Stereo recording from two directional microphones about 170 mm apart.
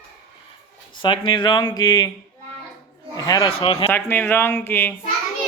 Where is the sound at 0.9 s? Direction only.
30° left (ahead or behind).